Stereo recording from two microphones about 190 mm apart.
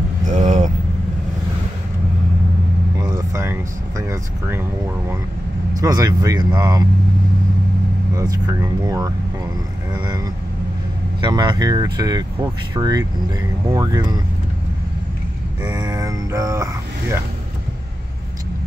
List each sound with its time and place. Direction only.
0.3 s vehicle: 40° right (ahead or behind)
3.0 s vehicle: 15° right (ahead or behind)
4.1 s speech: 10° right (ahead or behind)
5.8 s speech: 20° right (ahead or behind)
8.2 s speech: 15° right (ahead or behind)
11.1 s speech: 25° right (ahead or behind)
15.7 s mantra: 20° right (ahead or behind)